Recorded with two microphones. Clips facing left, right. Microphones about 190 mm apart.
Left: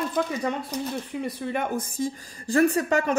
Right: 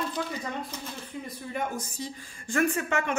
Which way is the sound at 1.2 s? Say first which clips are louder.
Left 4 dB; 70° left (ahead or behind).